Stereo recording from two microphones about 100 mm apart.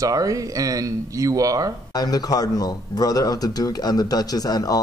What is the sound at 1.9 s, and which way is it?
Speech, 40° left (ahead or behind).